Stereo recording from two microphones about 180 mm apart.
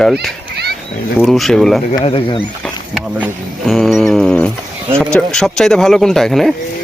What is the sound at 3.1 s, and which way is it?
Speech, 5° right (ahead or behind).